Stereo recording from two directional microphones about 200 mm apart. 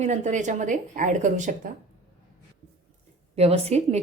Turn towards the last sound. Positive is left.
turn(degrees=-30)  # may be behind; listen again after turning